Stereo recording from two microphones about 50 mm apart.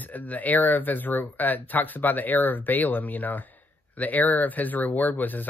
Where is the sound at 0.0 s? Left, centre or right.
Left.